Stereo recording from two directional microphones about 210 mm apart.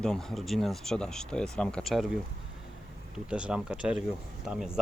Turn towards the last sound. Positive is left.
turn(degrees=0)  # may be behind; listen again after turning